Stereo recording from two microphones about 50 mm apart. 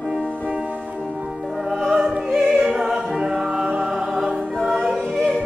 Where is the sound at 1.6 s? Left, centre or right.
Centre.